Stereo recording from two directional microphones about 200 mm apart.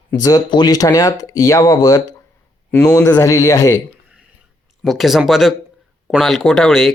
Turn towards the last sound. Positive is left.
turn(degrees=0)  # may be behind; listen again after turning